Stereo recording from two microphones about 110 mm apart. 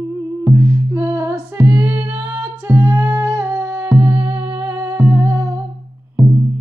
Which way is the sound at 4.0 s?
10° right (ahead or behind).